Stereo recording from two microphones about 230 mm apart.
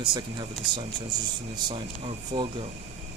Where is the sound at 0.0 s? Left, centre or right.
Centre.